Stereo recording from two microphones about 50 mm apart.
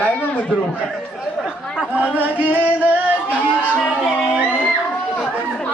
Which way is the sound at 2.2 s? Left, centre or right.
Right.